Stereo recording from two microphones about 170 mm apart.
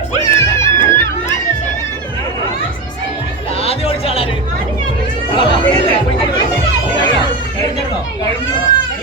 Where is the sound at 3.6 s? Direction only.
35° left (ahead or behind).